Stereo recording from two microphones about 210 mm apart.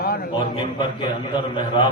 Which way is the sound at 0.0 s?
45° left (ahead or behind).